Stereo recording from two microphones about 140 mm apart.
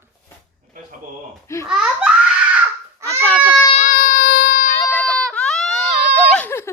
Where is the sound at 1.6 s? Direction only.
5° right (ahead or behind).